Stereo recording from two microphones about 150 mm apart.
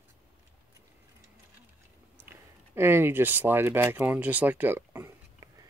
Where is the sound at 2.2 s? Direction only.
15° right (ahead or behind).